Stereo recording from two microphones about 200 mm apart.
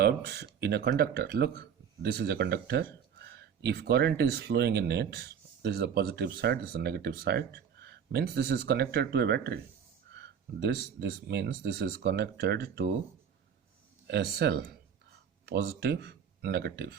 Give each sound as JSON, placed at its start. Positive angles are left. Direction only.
{"t": 0.0, "sound": "speech", "side_deg": -55}
{"t": 14.1, "sound": "speech", "side_deg": -55}